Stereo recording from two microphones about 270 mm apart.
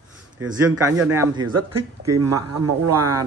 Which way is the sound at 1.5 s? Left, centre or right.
Right.